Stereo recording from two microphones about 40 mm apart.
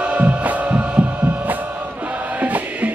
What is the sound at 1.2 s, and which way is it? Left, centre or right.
Music, right.